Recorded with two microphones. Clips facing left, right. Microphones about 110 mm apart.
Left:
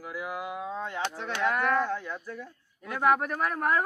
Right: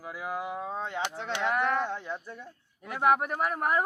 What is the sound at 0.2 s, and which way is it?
Speech, 35° right (ahead or behind).